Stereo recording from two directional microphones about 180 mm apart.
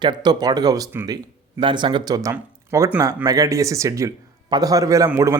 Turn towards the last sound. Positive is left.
turn(degrees=-15)  # may be behind; listen again after turning